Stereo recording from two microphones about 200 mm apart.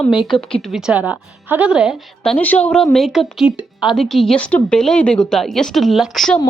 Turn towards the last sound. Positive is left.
turn(degrees=0)  # may be behind; listen again after turning